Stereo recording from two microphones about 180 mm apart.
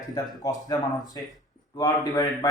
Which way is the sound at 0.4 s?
20° left (ahead or behind).